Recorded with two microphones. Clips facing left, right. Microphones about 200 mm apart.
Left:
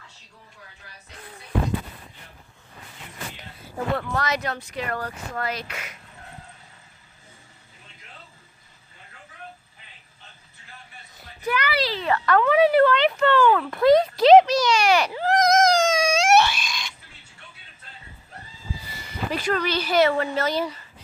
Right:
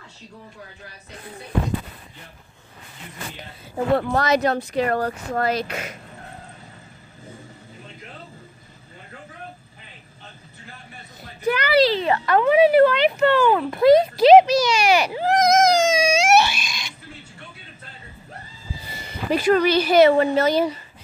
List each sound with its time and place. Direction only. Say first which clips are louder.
3.9 s speech: right 7 dB; 35° right (ahead or behind)
11.4 s speech: right 7 dB; 30° right (ahead or behind); by 16.9 s 10° right (ahead or behind)
18.9 s a sound: right 4 dB; 25° right (ahead or behind)
19.3 s speech: right 8 dB; 15° right (ahead or behind)